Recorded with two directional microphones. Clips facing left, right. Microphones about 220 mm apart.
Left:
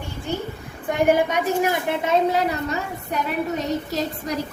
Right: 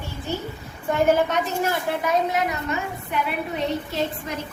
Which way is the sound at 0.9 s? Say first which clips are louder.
Left 1 dB; 15° left (ahead or behind).